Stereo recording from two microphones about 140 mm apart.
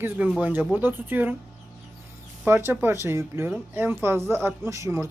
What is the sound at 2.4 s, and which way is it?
Speech, 15° right (ahead or behind).